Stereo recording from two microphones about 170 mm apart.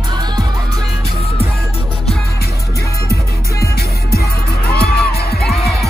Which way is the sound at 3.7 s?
65° left (ahead or behind).